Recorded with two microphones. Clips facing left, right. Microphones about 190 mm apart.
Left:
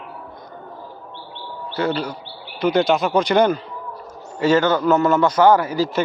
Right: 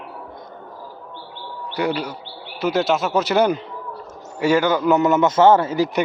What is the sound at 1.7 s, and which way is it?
Speech, 15° right (ahead or behind).